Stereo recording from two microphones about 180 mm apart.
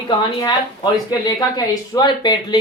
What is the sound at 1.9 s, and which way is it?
Speech, 25° left (ahead or behind).